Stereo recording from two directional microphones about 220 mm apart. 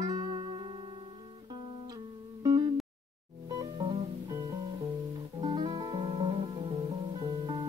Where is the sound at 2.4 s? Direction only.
20° right (ahead or behind).